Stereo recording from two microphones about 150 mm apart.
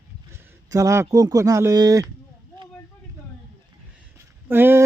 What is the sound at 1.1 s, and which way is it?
Speech, 25° right (ahead or behind).